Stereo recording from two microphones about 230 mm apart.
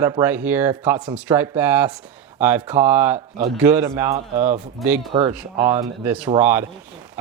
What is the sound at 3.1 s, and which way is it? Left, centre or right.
Speech, right.